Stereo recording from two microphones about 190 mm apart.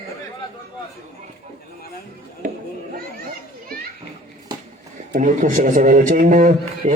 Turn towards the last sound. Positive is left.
turn(degrees=-40)  # may be behind; listen again after turning